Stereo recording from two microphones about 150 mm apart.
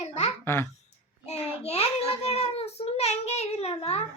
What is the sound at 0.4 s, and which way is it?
Speech, 15° left (ahead or behind).